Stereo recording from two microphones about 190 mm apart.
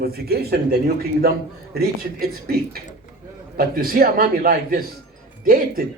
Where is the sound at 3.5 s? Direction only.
50° right (ahead or behind).